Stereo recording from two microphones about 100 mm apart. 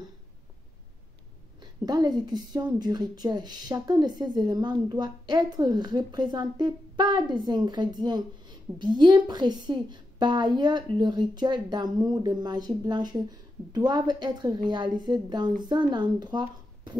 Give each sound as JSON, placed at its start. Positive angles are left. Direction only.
{"t": 1.6, "sound": "a woman's voice", "side_deg": -45}